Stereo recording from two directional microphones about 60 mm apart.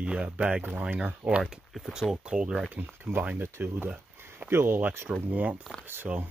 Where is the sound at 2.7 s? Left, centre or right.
Right.